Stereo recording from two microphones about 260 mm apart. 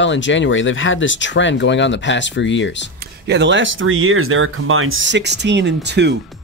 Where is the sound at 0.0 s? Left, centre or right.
Left.